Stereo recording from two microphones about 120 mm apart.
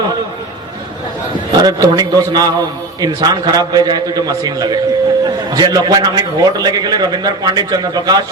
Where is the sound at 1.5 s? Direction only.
35° right (ahead or behind).